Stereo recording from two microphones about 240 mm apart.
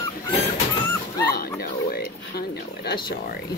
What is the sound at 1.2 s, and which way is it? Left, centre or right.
Dog, left.